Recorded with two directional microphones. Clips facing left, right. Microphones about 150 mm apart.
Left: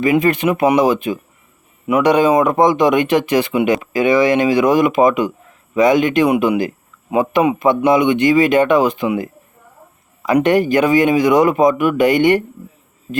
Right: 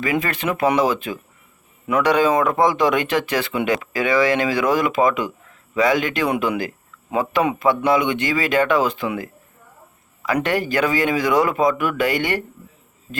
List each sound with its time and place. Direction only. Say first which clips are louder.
0.0 s speech: left 8 dB; 20° left (ahead or behind)